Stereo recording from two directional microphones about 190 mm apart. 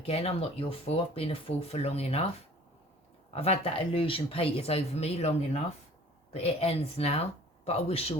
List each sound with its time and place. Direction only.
0.0 s speech: 30° left (ahead or behind)
3.3 s speech: 30° left (ahead or behind)
6.3 s speech: 30° left (ahead or behind)